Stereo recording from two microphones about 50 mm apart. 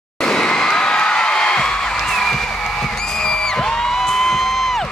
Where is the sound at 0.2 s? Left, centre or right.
Centre.